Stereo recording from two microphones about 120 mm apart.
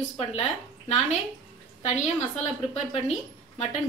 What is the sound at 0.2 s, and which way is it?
A woman's voice, 60° left (ahead or behind).